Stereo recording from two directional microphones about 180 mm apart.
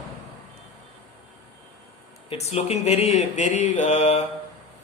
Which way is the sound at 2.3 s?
35° left (ahead or behind).